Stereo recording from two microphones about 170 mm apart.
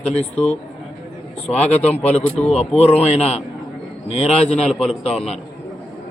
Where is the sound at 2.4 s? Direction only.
40° left (ahead or behind).